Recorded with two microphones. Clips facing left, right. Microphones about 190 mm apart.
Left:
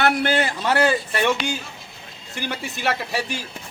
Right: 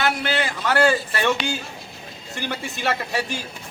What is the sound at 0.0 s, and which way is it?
Speech, 50° left (ahead or behind).